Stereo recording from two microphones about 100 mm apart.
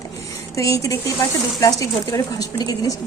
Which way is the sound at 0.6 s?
30° left (ahead or behind).